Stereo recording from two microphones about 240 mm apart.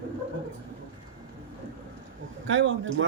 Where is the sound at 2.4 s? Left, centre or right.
Right.